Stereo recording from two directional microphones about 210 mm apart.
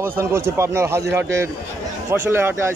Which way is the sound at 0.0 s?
10° right (ahead or behind).